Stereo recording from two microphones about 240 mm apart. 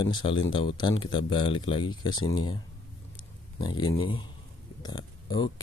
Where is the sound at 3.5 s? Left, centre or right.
Centre.